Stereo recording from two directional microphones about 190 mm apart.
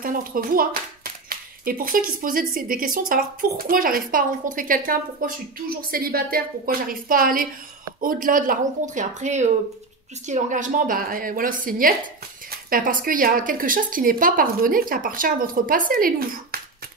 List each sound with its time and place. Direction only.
0.0 s a woman's voice: 50° right (ahead or behind)